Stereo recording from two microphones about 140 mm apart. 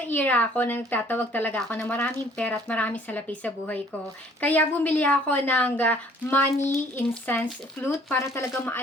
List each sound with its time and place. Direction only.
0.0 s speech: 10° left (ahead or behind)